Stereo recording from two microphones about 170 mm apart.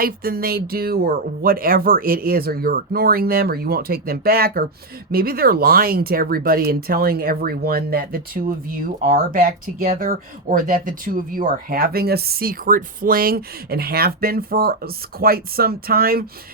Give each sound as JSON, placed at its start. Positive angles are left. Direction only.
{"t": 0.0, "sound": "speech", "side_deg": -60}